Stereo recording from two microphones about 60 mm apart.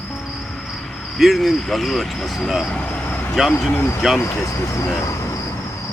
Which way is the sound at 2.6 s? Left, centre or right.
Centre.